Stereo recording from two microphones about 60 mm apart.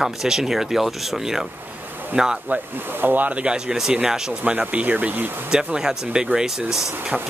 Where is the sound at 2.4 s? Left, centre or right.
Right; by 4.4 s centre.